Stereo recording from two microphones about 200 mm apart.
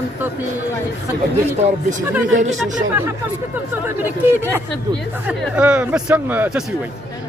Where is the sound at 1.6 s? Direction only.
40° right (ahead or behind).